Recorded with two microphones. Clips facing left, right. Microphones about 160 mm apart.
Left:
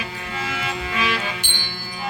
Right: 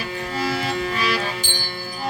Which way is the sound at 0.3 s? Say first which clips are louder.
Right 4 dB; 35° right (ahead or behind).